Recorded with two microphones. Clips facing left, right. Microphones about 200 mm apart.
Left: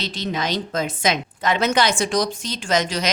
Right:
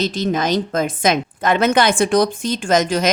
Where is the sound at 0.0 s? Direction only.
45° right (ahead or behind).